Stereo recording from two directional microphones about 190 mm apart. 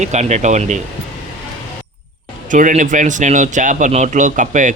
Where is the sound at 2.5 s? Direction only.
40° right (ahead or behind).